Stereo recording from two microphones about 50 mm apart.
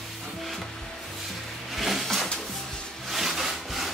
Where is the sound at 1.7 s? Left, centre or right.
Centre.